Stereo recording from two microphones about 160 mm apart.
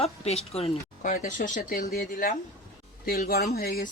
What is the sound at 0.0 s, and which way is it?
Speech, 40° left (ahead or behind).